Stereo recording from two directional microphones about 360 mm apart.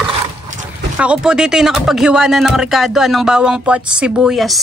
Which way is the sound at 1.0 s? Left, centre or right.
Centre.